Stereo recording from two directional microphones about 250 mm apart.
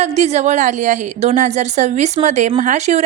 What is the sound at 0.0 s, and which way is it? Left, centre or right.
A woman's voice, right.